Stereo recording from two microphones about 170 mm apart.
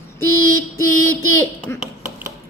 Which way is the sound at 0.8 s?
15° left (ahead or behind).